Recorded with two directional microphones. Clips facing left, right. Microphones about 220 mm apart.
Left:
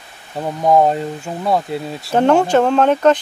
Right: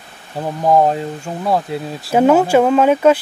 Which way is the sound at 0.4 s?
Centre (ahead or behind).